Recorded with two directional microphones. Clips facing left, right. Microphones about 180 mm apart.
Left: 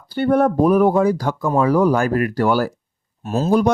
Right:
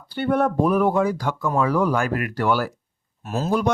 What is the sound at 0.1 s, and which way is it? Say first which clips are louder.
Speech: left 5 dB; 40° left (ahead or behind).